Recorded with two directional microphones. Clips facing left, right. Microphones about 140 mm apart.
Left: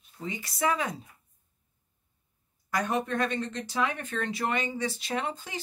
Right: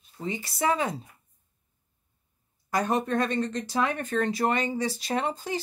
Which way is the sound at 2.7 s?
35° right (ahead or behind).